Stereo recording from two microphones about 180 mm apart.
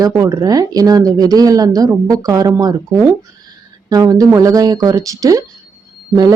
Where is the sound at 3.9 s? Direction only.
20° right (ahead or behind).